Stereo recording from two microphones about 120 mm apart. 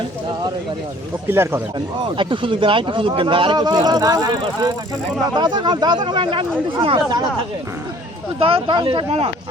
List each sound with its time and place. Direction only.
1.3 s speech: 20° right (ahead or behind)
2.1 s speech: 45° right (ahead or behind)
8.4 s speech: 45° right (ahead or behind)